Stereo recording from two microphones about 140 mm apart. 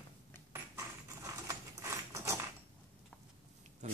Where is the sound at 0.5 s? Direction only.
25° right (ahead or behind).